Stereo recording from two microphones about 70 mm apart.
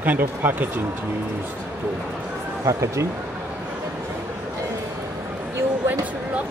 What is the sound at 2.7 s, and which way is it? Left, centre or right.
Speech, right.